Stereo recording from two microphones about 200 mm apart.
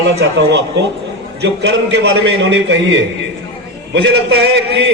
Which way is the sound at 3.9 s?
60° right (ahead or behind).